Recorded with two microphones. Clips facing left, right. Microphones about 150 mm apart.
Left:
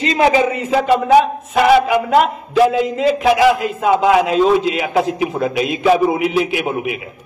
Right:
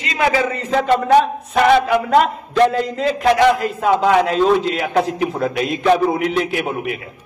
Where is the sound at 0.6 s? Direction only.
5° left (ahead or behind).